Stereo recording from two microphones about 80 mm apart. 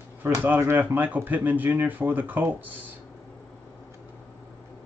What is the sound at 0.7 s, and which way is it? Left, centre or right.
Speech, right.